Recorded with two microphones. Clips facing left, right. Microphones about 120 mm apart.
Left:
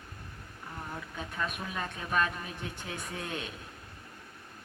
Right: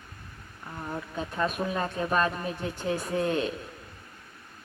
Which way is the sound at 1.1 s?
35° right (ahead or behind).